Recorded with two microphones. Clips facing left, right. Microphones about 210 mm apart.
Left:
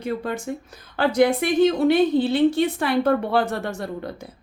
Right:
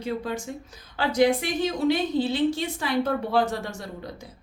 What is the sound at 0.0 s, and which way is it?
Speech, 55° left (ahead or behind).